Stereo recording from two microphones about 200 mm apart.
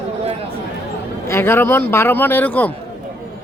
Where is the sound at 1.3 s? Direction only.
10° left (ahead or behind).